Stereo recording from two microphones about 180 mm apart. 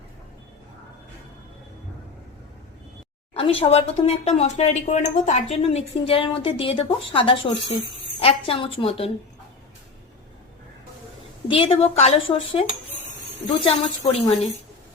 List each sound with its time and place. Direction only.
3.3 s speech: 30° left (ahead or behind)
11.4 s speech: 30° left (ahead or behind)
13.7 s speech: 30° left (ahead or behind)